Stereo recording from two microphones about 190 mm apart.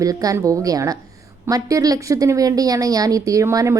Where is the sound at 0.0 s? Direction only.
20° right (ahead or behind).